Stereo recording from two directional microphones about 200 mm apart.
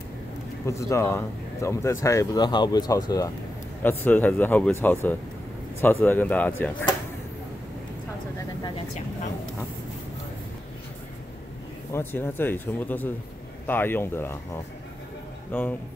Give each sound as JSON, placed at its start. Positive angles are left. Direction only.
{"t": 0.7, "sound": "speech", "side_deg": 15}
{"t": 11.9, "sound": "speech", "side_deg": 10}